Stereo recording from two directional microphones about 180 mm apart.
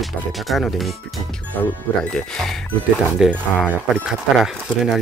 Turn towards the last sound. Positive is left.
turn(degrees=0)  # may be behind; listen again after turning